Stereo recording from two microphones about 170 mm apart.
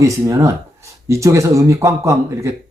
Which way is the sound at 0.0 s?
15° right (ahead or behind).